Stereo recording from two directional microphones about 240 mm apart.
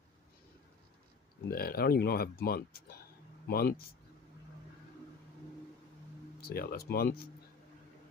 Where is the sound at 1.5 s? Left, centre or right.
Left.